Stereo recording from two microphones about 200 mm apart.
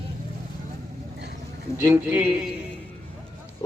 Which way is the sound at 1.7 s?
10° right (ahead or behind).